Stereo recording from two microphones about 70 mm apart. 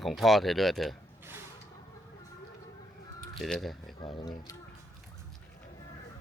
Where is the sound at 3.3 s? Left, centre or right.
Centre.